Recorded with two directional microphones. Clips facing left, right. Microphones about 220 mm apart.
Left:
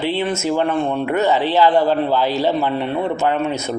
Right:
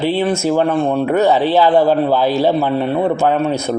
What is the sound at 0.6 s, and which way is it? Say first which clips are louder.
Speech: right 4 dB; 40° right (ahead or behind).